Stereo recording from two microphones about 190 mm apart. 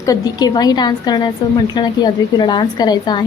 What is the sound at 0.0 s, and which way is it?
Speech, 20° left (ahead or behind).